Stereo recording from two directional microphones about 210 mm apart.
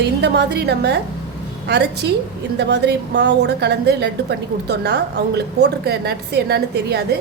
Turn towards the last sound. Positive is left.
turn(degrees=-50)  # may be behind; listen again after turning